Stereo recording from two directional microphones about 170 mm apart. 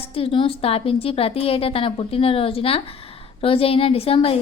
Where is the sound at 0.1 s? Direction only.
35° left (ahead or behind).